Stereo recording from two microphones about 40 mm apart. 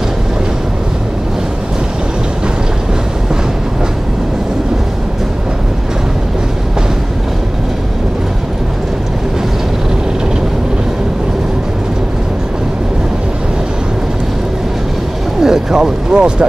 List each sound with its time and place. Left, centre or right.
15.4 s vehicle: centre